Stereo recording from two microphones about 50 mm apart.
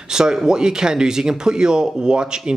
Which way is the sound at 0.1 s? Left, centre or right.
Centre.